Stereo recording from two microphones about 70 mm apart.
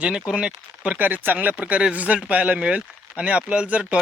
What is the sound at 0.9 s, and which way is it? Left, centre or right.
Speech, right.